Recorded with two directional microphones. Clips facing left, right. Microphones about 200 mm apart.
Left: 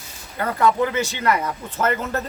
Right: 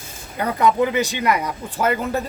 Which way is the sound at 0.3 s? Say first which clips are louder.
Right 1 dB; 15° right (ahead or behind).